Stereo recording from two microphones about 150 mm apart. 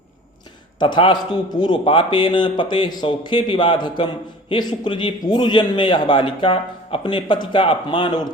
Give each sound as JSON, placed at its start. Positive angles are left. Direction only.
{"t": 0.8, "sound": "a man's voice", "side_deg": 35}